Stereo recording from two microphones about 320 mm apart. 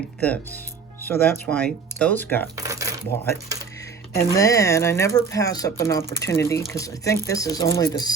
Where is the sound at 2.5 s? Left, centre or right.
Centre.